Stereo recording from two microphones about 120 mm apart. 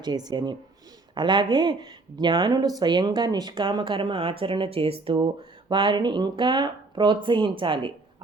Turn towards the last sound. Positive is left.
turn(degrees=-45)  # may be behind; listen again after turning